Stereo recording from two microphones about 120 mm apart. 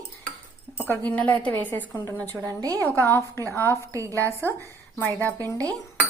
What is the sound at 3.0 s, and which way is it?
Speech, 20° left (ahead or behind).